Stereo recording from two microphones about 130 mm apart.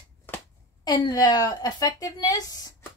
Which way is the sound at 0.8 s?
30° left (ahead or behind).